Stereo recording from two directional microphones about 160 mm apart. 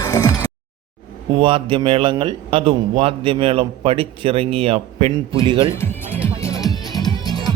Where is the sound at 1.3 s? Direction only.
35° right (ahead or behind).